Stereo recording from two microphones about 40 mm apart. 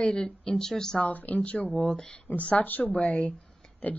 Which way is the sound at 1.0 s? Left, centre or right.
Left.